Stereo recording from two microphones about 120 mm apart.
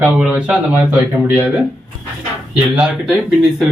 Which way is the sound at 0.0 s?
10° right (ahead or behind).